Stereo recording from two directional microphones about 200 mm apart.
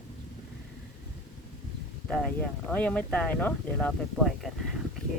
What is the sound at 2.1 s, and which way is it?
Speech, 5° left (ahead or behind).